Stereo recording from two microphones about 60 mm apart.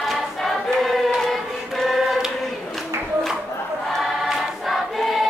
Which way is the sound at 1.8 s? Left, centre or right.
Centre.